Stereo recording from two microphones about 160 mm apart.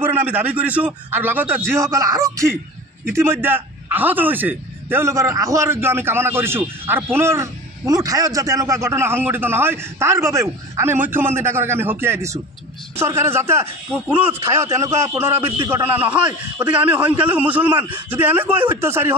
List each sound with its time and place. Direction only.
0.0 s a man's voice: 10° right (ahead or behind)
15.4 s a man's voice: 35° right (ahead or behind)
15.7 s a man's voice: 10° right (ahead or behind)